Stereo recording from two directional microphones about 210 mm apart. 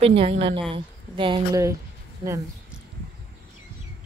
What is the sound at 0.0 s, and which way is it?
Speech, 30° right (ahead or behind).